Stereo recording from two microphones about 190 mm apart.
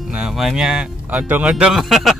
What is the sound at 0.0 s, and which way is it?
A man's voice, 5° right (ahead or behind).